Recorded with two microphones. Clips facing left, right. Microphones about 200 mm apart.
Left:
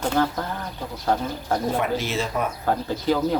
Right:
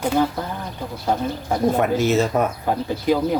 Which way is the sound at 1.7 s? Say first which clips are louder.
Right 6 dB; 45° right (ahead or behind).